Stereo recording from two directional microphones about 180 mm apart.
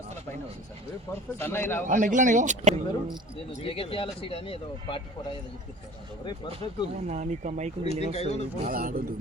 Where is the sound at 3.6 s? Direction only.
30° left (ahead or behind).